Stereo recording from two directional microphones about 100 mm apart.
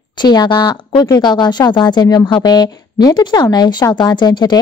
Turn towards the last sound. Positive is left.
turn(degrees=45)  # may be behind; listen again after turning